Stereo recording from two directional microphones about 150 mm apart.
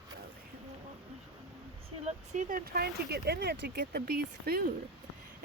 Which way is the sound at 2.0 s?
55° right (ahead or behind).